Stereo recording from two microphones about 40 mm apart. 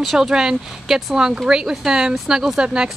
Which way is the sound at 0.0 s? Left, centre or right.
Centre.